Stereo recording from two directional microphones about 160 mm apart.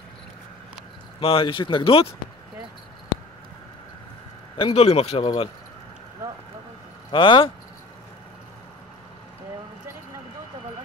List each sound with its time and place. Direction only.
1.2 s speech: 35° left (ahead or behind)
4.6 s speech: 35° left (ahead or behind)
7.1 s speech: 30° left (ahead or behind)